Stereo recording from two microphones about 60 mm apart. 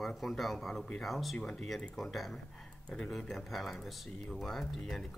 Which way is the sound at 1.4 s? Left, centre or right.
Centre.